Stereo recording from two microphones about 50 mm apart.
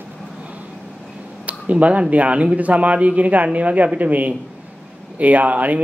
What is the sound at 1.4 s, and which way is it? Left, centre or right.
A man's voice, right.